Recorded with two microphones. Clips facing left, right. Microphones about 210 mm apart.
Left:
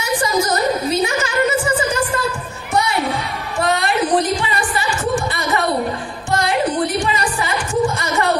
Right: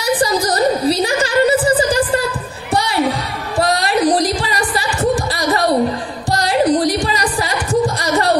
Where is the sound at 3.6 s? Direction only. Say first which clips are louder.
Right 3 dB; 35° right (ahead or behind).